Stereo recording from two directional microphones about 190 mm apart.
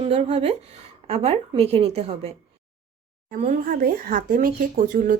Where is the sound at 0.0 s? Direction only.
35° right (ahead or behind).